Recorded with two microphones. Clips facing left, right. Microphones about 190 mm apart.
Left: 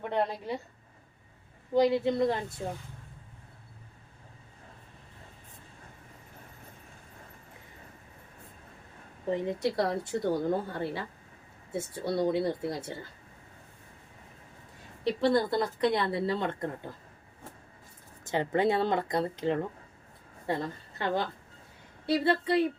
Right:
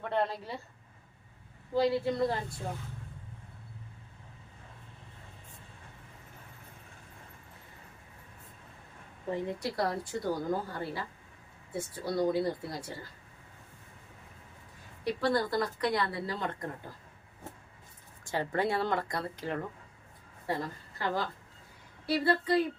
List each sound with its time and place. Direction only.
0.0 s a woman's voice: 15° left (ahead or behind)
1.7 s speech: 20° left (ahead or behind)
9.3 s speech: 25° left (ahead or behind)
15.0 s speech: 25° left (ahead or behind)
18.3 s a woman's voice: 20° left (ahead or behind)